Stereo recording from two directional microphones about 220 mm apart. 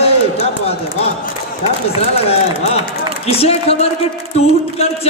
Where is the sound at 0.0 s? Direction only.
25° left (ahead or behind).